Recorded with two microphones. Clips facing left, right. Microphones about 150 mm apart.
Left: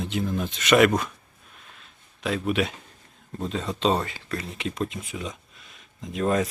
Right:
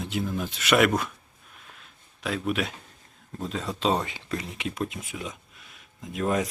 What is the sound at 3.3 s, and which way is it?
Speech, centre (ahead or behind).